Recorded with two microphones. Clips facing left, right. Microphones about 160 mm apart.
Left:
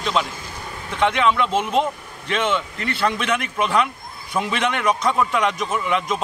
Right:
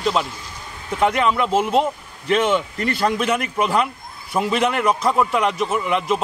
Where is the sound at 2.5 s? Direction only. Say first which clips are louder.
Right 4 dB; 40° right (ahead or behind).